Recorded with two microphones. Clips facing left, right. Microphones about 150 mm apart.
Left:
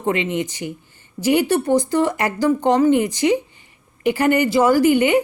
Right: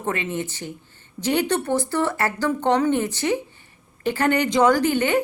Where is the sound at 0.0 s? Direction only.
20° left (ahead or behind).